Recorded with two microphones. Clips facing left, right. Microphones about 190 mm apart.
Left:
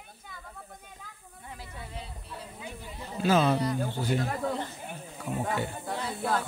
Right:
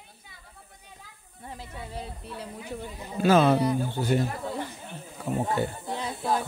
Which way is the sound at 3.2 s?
60° right (ahead or behind).